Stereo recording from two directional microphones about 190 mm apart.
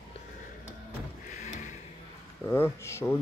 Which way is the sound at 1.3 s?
40° left (ahead or behind).